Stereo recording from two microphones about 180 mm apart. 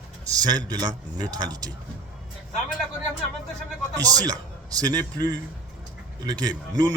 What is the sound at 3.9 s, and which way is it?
A man's voice, 20° right (ahead or behind).